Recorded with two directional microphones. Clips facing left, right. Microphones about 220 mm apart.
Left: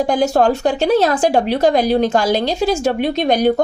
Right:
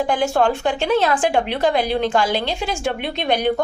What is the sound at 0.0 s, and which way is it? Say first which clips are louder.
Speech: left 4 dB; 40° left (ahead or behind).